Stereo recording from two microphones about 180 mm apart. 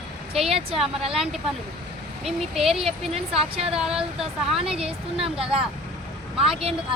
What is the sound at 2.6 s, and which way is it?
Speech, centre (ahead or behind).